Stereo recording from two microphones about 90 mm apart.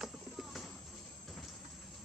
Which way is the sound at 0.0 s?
Centre (ahead or behind).